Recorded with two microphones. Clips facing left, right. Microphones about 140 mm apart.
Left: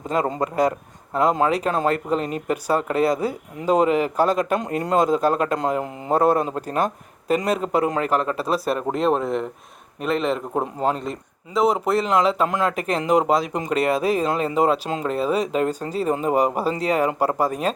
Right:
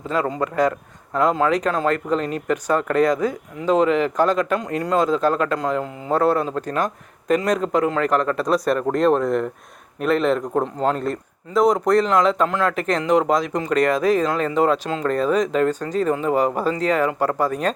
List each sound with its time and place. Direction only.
0.1 s speech: 15° left (ahead or behind)
4.6 s speech: 20° left (ahead or behind); by 10.4 s centre (ahead or behind)
10.5 s speech: 10° left (ahead or behind)